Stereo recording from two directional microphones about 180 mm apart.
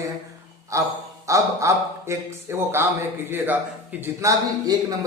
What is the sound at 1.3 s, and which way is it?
A man's voice, 15° right (ahead or behind).